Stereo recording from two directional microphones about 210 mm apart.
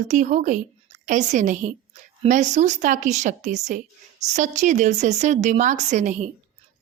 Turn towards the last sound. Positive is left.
turn(degrees=-35)  # may be behind; listen again after turning